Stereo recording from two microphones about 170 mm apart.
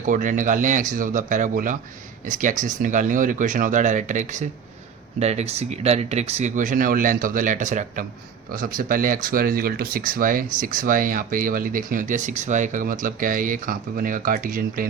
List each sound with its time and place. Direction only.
0.0 s speech: 50° right (ahead or behind)
8.5 s speech: 55° right (ahead or behind)